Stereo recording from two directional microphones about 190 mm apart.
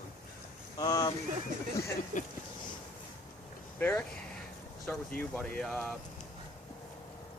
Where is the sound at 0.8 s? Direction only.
20° left (ahead or behind).